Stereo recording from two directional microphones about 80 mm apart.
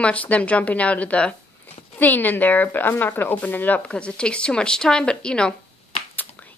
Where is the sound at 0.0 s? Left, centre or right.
Centre.